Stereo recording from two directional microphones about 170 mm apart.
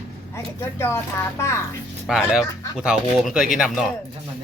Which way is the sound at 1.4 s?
15° left (ahead or behind).